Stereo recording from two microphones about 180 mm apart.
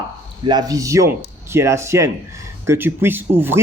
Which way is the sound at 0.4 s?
20° right (ahead or behind).